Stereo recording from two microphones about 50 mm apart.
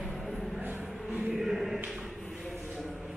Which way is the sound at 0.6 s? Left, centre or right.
Right.